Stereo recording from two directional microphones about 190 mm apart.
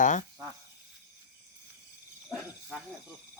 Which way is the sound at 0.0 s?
40° left (ahead or behind).